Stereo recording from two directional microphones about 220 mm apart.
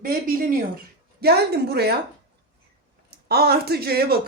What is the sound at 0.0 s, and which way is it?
Speech, 40° right (ahead or behind).